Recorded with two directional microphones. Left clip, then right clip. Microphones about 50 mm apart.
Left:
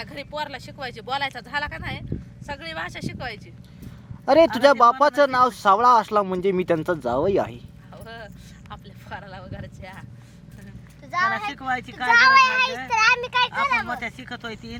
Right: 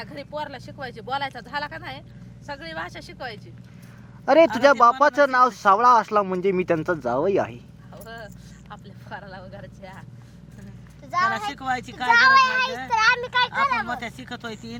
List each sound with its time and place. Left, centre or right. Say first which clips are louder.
0.0 s speech: left 1 dB; left
1.5 s speech: left 2 dB; centre
4.3 s speech: even; left
7.9 s a sound: even; left
9.0 s vehicle: left 1 dB; left
11.1 s a child's voice: even; centre
11.5 s speech: even; right
12.0 s a child's voice: left 1 dB; centre
13.8 s speech: left 1 dB; right